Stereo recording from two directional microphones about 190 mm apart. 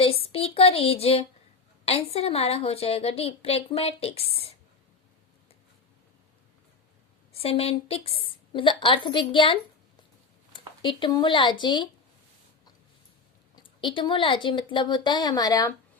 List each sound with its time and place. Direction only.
0.0 s a woman's voice: 30° left (ahead or behind)
7.3 s a woman's voice: 30° left (ahead or behind)
10.8 s a woman's voice: 25° left (ahead or behind)
13.6 s a woman's voice: 25° left (ahead or behind)